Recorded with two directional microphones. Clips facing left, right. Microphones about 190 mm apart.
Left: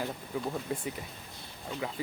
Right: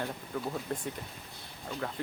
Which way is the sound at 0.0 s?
5° left (ahead or behind).